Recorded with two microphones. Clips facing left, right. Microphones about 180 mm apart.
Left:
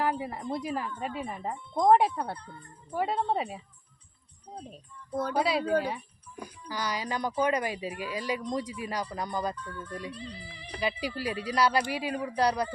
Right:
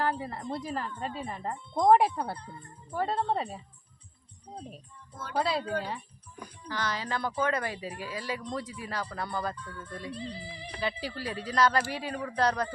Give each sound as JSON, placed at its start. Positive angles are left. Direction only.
{"t": 0.0, "sound": "speech", "side_deg": 10}
{"t": 1.7, "sound": "speech", "side_deg": 0}
{"t": 2.9, "sound": "speech", "side_deg": 10}
{"t": 5.4, "sound": "speech", "side_deg": 10}
{"t": 10.1, "sound": "music", "side_deg": -35}
{"t": 10.8, "sound": "speech", "side_deg": 15}